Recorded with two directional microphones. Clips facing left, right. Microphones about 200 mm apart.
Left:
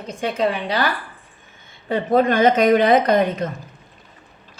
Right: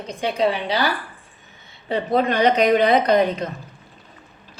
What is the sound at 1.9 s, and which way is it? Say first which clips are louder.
A woman's voice: left 3 dB; 45° left (ahead or behind).